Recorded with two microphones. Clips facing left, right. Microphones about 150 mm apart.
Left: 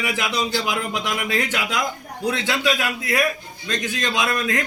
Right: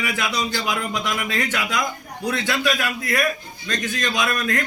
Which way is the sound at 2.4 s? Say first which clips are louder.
Right 1 dB; 20° left (ahead or behind).